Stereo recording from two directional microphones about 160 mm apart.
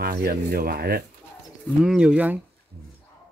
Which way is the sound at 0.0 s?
70° right (ahead or behind).